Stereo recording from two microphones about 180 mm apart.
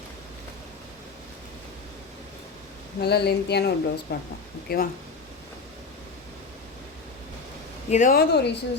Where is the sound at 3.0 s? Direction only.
65° left (ahead or behind).